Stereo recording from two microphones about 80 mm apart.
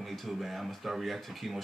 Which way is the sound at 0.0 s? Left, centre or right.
Centre.